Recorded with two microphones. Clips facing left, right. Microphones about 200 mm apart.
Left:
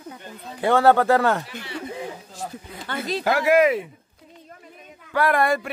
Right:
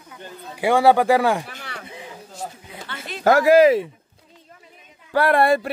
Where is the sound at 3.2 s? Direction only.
45° right (ahead or behind).